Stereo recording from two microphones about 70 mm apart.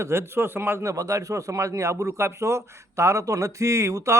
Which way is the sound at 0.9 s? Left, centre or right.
Right.